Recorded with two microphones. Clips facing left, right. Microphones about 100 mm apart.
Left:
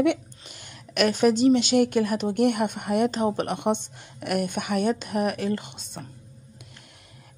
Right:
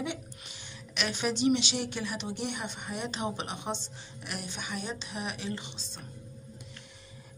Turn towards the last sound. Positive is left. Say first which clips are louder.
# left 7 dB
turn(degrees=60)  # may be behind; listen again after turning